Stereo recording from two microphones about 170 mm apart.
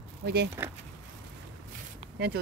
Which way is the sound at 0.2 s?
70° right (ahead or behind).